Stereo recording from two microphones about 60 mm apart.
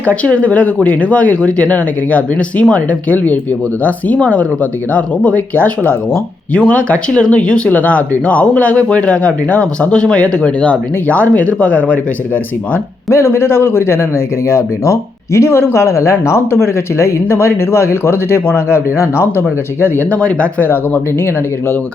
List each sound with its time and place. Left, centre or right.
0.0 s speech: left
13.1 s speech: left
20.1 s speech: left
20.6 s speech: left